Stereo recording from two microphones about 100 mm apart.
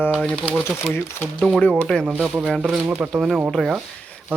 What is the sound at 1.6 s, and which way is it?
Speech, 15° left (ahead or behind).